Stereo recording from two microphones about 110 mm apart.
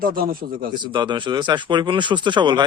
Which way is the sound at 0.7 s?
45° right (ahead or behind).